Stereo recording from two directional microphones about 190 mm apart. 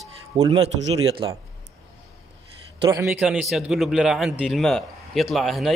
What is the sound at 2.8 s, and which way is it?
A man's voice, 15° right (ahead or behind).